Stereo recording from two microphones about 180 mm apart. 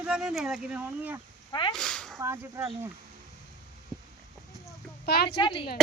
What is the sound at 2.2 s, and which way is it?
Speech, 15° right (ahead or behind).